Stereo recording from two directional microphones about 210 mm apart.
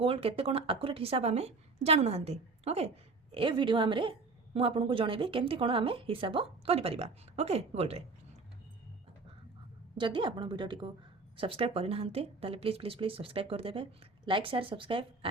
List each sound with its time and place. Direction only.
0.0 s a woman's voice: 25° right (ahead or behind)
10.0 s a woman's voice: 25° right (ahead or behind)